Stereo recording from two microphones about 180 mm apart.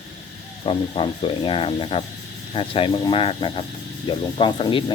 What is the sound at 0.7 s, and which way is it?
Speech, 30° left (ahead or behind).